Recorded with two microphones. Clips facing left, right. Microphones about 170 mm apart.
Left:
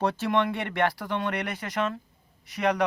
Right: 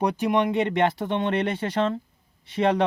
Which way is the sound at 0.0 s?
15° right (ahead or behind).